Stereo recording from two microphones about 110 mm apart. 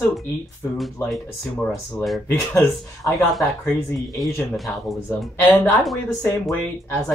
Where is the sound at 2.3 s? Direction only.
20° left (ahead or behind).